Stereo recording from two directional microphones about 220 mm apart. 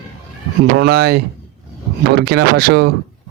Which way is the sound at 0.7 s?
45° right (ahead or behind).